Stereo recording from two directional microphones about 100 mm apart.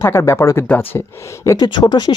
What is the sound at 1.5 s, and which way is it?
Speech, 40° left (ahead or behind).